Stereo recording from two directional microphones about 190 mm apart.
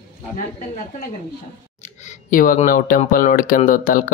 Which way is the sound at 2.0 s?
45° left (ahead or behind).